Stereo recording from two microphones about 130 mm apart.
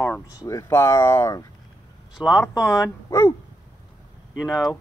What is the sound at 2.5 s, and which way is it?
Speech, 25° left (ahead or behind).